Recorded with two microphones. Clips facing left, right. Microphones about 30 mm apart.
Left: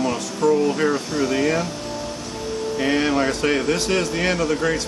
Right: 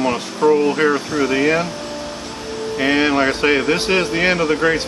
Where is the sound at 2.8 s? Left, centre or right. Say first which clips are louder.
Right 4 dB; right.